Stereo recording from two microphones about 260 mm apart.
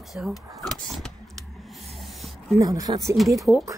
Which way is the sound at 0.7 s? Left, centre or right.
Centre.